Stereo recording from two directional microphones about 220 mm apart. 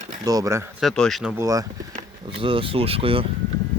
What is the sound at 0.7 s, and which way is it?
Speech, centre (ahead or behind).